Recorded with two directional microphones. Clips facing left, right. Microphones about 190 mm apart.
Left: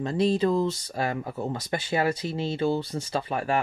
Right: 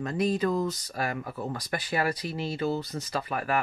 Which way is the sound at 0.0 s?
30° left (ahead or behind).